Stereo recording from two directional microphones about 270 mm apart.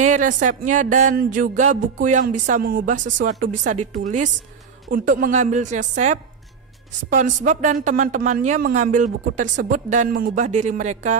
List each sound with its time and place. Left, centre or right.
0.0 s speech: right